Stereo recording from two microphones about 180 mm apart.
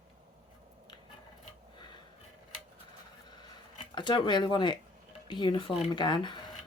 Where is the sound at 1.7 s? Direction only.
25° left (ahead or behind).